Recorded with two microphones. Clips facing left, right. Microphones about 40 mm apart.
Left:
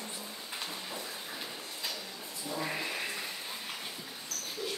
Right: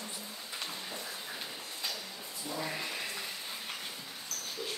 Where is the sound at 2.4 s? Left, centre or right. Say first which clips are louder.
Left 2 dB; centre.